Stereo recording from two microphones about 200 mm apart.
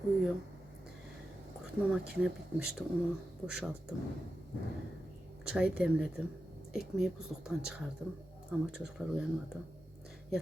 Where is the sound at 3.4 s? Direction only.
5° right (ahead or behind).